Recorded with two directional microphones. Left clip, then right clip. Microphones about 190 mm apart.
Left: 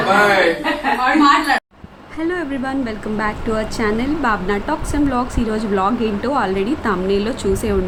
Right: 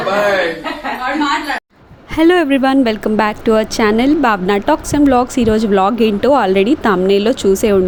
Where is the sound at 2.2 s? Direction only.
45° right (ahead or behind).